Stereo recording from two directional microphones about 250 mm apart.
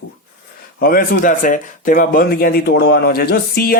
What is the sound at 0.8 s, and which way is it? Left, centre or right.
Speech, left.